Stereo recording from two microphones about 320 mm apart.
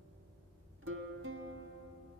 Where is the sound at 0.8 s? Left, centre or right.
Right.